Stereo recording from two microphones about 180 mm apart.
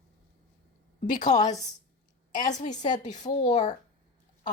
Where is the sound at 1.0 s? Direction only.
45° left (ahead or behind).